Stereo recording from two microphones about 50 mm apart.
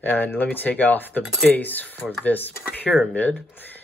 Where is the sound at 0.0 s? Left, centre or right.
Left.